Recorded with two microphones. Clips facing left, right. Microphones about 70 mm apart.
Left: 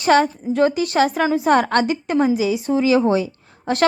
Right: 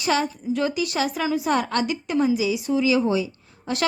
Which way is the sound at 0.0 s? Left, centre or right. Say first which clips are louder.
Left 7 dB; left.